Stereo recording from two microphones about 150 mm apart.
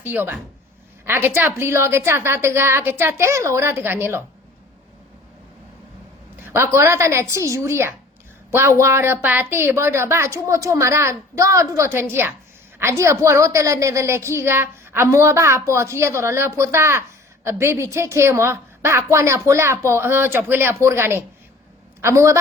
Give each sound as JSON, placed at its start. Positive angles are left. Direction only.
{"t": 0.0, "sound": "a woman's voice", "side_deg": -10}
{"t": 6.4, "sound": "a woman's voice", "side_deg": -15}